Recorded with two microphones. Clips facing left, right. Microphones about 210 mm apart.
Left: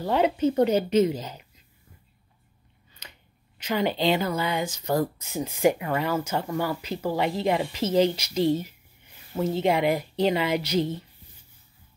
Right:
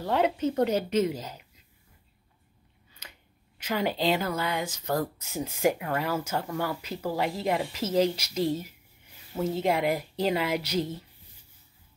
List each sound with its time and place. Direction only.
0.0 s speech: centre (ahead or behind)
3.0 s speech: 5° right (ahead or behind)
9.6 s speech: centre (ahead or behind)